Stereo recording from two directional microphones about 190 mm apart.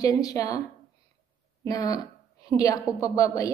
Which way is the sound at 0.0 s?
20° left (ahead or behind).